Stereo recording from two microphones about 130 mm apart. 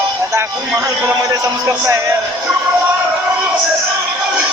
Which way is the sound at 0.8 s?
25° right (ahead or behind).